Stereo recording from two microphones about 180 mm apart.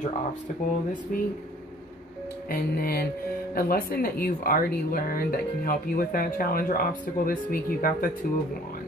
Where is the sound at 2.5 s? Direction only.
60° left (ahead or behind).